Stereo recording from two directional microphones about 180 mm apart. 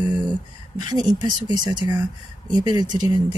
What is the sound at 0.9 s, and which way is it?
Speech, 20° right (ahead or behind).